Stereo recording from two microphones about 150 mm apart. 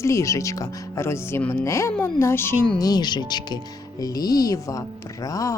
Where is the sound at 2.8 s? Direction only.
25° left (ahead or behind).